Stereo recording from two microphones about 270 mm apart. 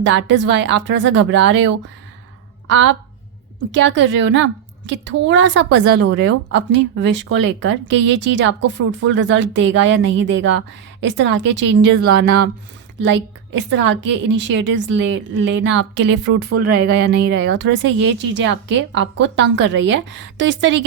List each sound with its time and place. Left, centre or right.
0.0 s a woman's voice: right